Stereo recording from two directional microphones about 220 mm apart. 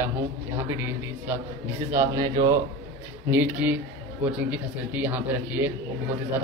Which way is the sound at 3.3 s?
5° right (ahead or behind).